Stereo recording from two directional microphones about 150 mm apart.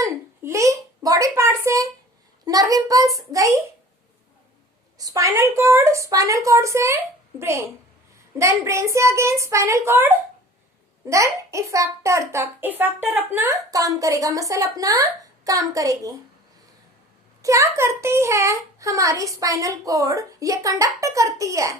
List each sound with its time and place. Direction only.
0.0 s a sound: 20° right (ahead or behind)
2.4 s a child's voice: 25° right (ahead or behind)
4.9 s a child's voice: 20° right (ahead or behind)
17.4 s a child's voice: 20° right (ahead or behind)